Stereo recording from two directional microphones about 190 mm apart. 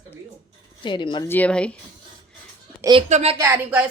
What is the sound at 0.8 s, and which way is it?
Speech, 25° left (ahead or behind).